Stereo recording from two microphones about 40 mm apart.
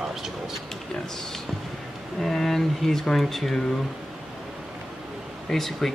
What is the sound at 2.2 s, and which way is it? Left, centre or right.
Speech, centre.